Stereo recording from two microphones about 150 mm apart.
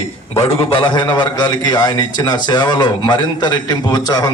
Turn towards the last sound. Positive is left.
turn(degrees=25)  # may be behind; listen again after turning